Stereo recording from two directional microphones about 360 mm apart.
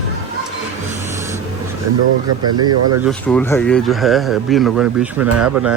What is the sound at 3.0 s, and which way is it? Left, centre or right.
Speech, centre.